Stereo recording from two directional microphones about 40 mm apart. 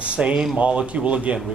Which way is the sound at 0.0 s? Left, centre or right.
Right.